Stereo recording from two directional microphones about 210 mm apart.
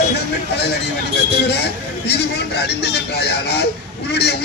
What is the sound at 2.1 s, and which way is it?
Speech, 50° left (ahead or behind).